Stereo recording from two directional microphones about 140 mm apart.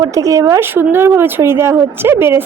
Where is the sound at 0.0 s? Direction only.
25° right (ahead or behind).